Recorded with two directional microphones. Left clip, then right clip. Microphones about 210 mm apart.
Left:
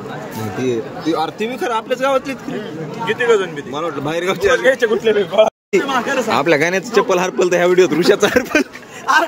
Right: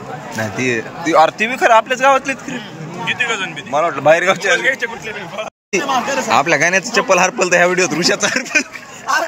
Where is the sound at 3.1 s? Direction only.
20° left (ahead or behind).